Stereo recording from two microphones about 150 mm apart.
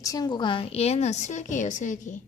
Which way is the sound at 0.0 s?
25° left (ahead or behind).